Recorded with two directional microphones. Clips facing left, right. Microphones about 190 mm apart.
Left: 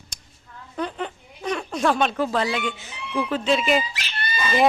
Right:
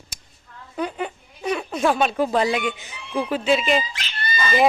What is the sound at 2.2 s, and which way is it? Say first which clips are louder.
A woman's voice: right 3 dB; 15° right (ahead or behind).